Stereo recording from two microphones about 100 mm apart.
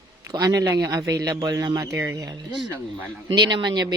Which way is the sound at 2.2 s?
40° right (ahead or behind).